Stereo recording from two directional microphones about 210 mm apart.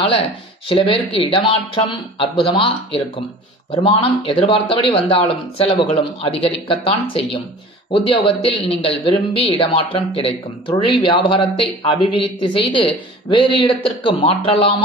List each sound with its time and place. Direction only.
0.7 s speech: 25° left (ahead or behind)